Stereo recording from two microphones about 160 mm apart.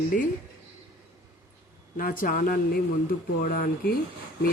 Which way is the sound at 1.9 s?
60° left (ahead or behind).